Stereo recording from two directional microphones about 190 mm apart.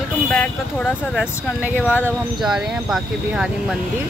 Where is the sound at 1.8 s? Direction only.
10° left (ahead or behind).